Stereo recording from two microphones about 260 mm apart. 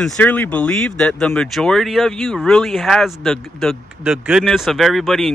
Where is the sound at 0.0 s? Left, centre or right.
Centre.